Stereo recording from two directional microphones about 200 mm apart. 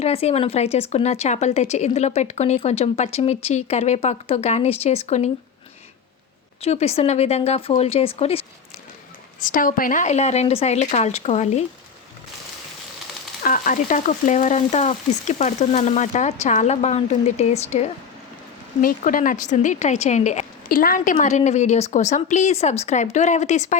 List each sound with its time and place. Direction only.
0.0 s a woman's voice: 30° left (ahead or behind)
6.6 s a woman's voice: 30° left (ahead or behind)
9.4 s a woman's voice: 40° left (ahead or behind)
13.4 s a woman's voice: 40° left (ahead or behind)
18.8 s a woman's voice: 45° left (ahead or behind)